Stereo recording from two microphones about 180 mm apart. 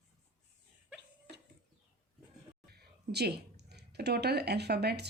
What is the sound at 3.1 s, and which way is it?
Speech, 65° right (ahead or behind).